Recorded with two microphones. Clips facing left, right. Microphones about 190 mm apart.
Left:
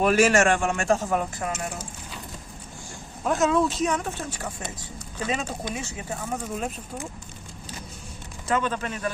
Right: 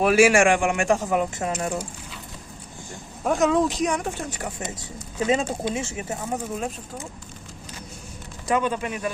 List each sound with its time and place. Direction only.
0.0 s a man's voice: 10° right (ahead or behind)
3.2 s a man's voice: 15° right (ahead or behind)
8.4 s a man's voice: 15° right (ahead or behind)